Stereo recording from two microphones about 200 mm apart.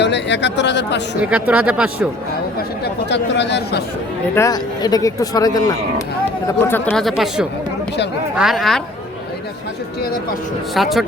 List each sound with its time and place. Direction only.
0.0 s speech: 60° left (ahead or behind)
1.2 s speech: 5° right (ahead or behind)
2.8 s speech: 60° left (ahead or behind)
4.4 s speech: 20° left (ahead or behind); by 8.8 s centre (ahead or behind)
10.8 s speech: centre (ahead or behind)